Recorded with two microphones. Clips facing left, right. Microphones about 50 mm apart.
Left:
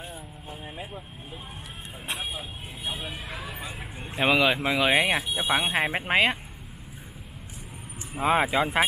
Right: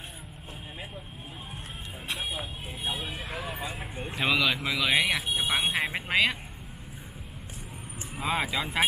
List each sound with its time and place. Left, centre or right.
2.9 s speech: centre
4.3 s speech: left
8.2 s speech: left